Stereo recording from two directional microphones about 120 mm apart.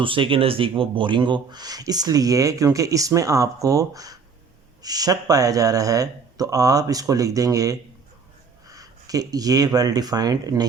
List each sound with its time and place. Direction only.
0.0 s speech: 45° right (ahead or behind)